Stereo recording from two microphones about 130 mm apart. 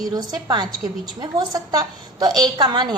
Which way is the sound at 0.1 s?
30° right (ahead or behind).